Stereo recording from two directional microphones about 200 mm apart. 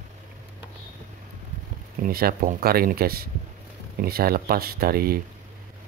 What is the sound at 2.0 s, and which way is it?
Speech, 45° right (ahead or behind).